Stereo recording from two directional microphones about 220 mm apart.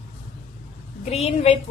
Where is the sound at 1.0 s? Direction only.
30° left (ahead or behind).